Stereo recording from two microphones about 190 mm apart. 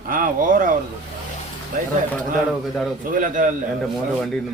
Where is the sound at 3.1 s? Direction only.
40° right (ahead or behind).